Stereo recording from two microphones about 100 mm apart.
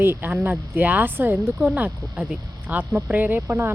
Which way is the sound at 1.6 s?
5° right (ahead or behind).